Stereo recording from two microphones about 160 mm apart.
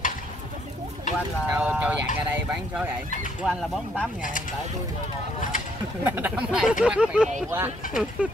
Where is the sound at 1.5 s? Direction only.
5° right (ahead or behind).